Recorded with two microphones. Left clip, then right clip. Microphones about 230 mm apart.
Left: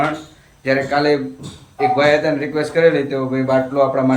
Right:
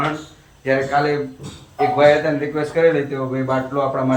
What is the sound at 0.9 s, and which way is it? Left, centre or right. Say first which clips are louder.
A man's voice: left 2 dB; centre.